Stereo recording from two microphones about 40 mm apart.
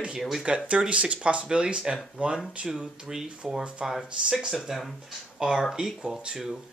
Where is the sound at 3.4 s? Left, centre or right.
Centre.